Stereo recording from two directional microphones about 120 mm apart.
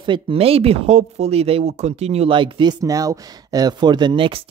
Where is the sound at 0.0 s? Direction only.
45° right (ahead or behind).